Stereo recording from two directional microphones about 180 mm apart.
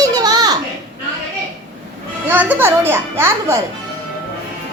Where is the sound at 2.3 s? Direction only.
10° right (ahead or behind).